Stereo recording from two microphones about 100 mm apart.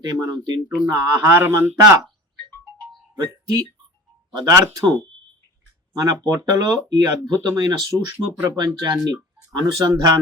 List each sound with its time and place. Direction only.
0.0 s speech: 40° right (ahead or behind)
1.4 s a man's voice: 25° right (ahead or behind)
4.3 s speech: 40° right (ahead or behind)